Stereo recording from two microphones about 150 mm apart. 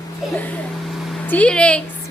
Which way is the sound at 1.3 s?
10° left (ahead or behind).